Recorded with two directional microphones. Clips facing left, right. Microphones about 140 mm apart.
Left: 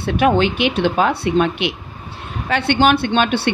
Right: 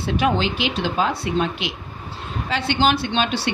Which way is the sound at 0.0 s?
60° left (ahead or behind).